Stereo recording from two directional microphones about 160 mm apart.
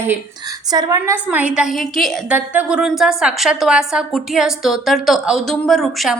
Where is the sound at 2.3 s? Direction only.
10° right (ahead or behind).